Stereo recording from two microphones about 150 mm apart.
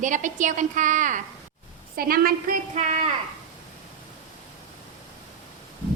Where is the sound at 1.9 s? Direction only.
80° right; by 3.1 s 50° right (ahead or behind).